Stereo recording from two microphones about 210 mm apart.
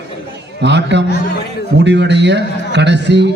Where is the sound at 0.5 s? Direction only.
55° right (ahead or behind).